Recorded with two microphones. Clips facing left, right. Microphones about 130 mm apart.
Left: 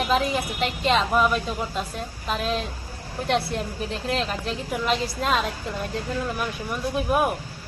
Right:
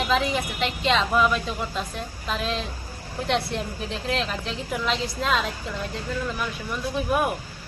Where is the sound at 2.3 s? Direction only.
45° left (ahead or behind).